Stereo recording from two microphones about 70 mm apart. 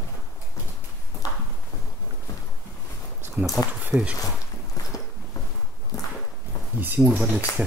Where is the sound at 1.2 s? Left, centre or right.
Left.